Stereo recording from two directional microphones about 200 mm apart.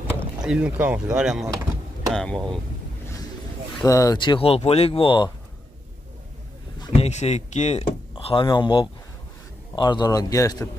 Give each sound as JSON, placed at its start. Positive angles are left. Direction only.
{"t": 0.4, "sound": "speech", "side_deg": -5}
{"t": 3.8, "sound": "speech", "side_deg": 15}
{"t": 6.9, "sound": "speech", "side_deg": 35}